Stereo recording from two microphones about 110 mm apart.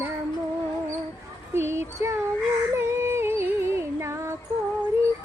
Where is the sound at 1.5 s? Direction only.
25° right (ahead or behind).